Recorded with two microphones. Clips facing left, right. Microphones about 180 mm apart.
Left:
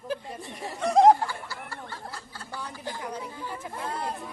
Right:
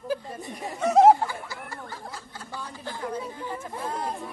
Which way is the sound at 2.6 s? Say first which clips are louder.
Right 2 dB; 15° left (ahead or behind).